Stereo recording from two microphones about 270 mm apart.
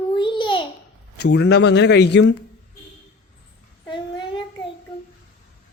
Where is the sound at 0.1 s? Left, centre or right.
Centre.